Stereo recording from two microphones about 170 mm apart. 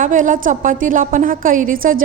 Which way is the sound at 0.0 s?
50° right (ahead or behind).